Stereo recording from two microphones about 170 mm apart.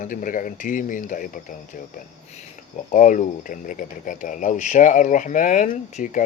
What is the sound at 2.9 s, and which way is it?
Speech, 50° left (ahead or behind).